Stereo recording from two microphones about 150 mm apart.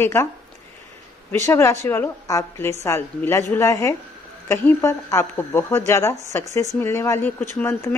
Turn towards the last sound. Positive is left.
turn(degrees=15)  # may be behind; listen again after turning